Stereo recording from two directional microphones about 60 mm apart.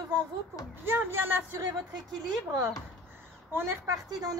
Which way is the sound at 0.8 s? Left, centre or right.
Right.